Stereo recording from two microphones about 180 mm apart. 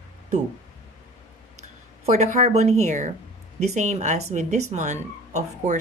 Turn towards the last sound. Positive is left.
turn(degrees=-40)  # may be behind; listen again after turning